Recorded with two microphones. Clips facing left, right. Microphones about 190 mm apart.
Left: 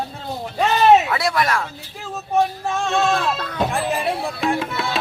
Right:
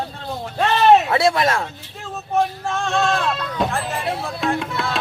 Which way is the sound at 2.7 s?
Centre (ahead or behind).